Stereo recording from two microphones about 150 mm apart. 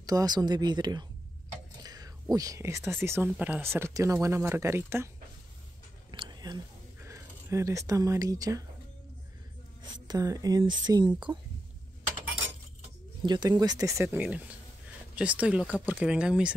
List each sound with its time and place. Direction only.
0.0 s speech: 25° right (ahead or behind)
6.1 s a sound: 30° right (ahead or behind)
7.0 s speech: 20° right (ahead or behind)
9.8 s speech: 25° right (ahead or behind)
13.2 s speech: 30° right (ahead or behind); by 16.5 s 5° right (ahead or behind)